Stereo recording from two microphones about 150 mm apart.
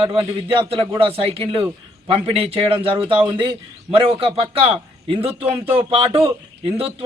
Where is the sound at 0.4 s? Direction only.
35° right (ahead or behind).